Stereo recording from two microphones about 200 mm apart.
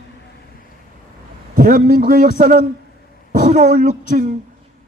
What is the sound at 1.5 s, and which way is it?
A woman's voice, 45° right (ahead or behind).